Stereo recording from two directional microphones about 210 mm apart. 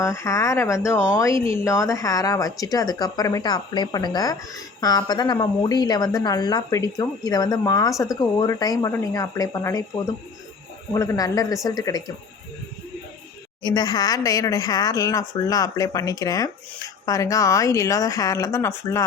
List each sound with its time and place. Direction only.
0.0 s a woman's voice: 15° left (ahead or behind)
13.6 s a woman's voice: 20° left (ahead or behind)